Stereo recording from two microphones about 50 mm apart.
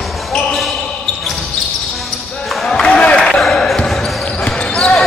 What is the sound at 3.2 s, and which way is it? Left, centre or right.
Basketball bounce, centre.